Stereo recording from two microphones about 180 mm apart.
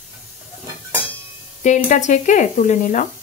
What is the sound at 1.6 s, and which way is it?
Speech, 45° left (ahead or behind).